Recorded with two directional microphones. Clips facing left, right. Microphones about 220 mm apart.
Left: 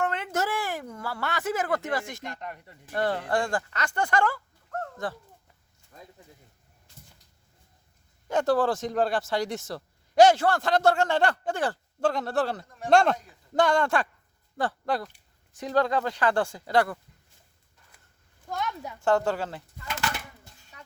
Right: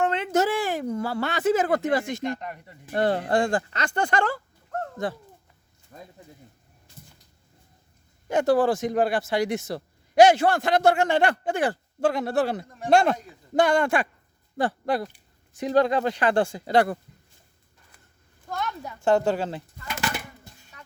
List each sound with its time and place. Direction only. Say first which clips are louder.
0.0 s a sound: right 6 dB; 20° right (ahead or behind)
2.4 s speech: right 2 dB; 10° right (ahead or behind)
2.9 s speech: right 4 dB; 20° right (ahead or behind)
8.3 s speech: right 3 dB; 10° right (ahead or behind)
12.9 s a man's voice: right 1 dB; 5° right (ahead or behind); by 17.0 s 20° right (ahead or behind)
18.4 s a sound: right 1 dB; 15° left (ahead or behind)
19.0 s bird: right 3 dB; 20° right (ahead or behind)